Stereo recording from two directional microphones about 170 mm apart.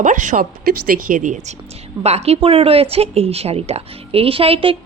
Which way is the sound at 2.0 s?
40° right (ahead or behind).